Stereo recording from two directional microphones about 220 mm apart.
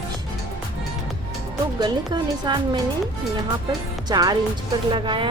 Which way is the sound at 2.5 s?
20° right (ahead or behind).